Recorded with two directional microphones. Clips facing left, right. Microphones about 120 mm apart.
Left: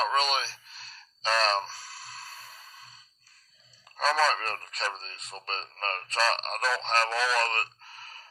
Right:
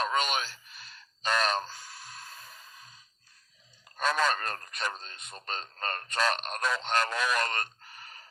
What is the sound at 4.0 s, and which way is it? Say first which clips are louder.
Speech: left 2 dB; 35° left (ahead or behind).